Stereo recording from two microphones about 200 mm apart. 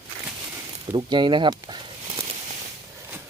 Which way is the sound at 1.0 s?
20° right (ahead or behind).